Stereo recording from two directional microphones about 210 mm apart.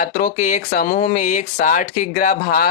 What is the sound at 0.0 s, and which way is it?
Speech, 40° left (ahead or behind).